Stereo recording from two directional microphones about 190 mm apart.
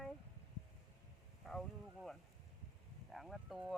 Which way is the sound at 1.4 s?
Centre (ahead or behind).